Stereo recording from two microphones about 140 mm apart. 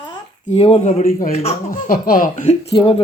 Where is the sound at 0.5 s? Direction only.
45° left (ahead or behind).